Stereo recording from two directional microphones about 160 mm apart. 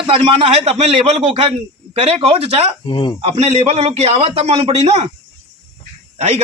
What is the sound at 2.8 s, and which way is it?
Speech, 30° left (ahead or behind).